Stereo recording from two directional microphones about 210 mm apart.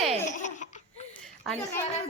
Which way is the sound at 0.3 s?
35° left (ahead or behind).